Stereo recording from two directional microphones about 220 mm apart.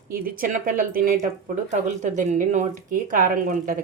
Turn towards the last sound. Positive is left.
turn(degrees=-40)  # may be behind; listen again after turning